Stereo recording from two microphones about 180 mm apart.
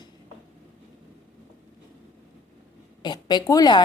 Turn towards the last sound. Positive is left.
turn(degrees=20)  # may be behind; listen again after turning